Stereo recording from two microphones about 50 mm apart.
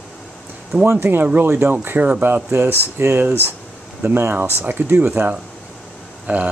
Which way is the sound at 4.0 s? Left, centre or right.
Right.